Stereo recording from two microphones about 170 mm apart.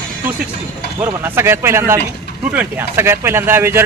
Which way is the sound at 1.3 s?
15° right (ahead or behind).